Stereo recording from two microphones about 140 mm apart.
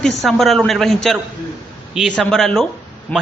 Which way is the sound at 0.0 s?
Centre (ahead or behind).